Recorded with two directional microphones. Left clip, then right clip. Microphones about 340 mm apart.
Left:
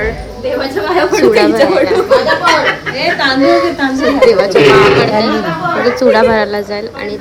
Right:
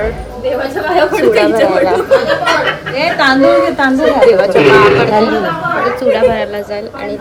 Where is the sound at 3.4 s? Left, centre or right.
Centre.